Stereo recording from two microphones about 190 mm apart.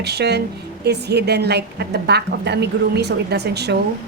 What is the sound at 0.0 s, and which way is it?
A woman's voice, 60° right (ahead or behind).